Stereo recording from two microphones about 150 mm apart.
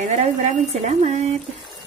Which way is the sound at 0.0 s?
50° right (ahead or behind).